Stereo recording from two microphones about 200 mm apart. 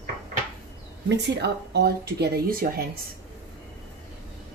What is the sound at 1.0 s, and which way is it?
Speech, 55° right (ahead or behind).